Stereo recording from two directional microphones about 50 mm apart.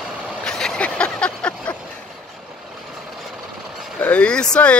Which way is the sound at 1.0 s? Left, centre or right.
Left.